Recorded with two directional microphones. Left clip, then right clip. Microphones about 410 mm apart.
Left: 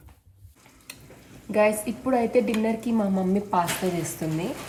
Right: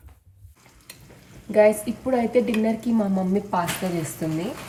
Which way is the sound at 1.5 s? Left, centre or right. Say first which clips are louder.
Right 4 dB; centre.